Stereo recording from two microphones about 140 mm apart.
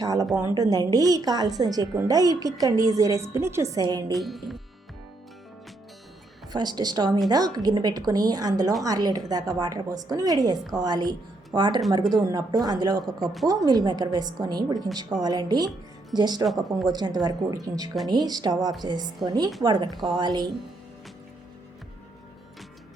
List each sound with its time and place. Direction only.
0.0 s a woman's voice: 25° right (ahead or behind)
4.2 s speech: centre (ahead or behind)
6.5 s a woman's voice: 30° right (ahead or behind)